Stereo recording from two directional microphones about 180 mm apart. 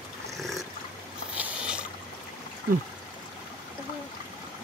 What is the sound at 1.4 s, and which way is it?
Boat, 5° right (ahead or behind).